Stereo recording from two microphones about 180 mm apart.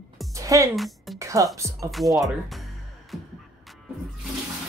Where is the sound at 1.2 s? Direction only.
15° right (ahead or behind).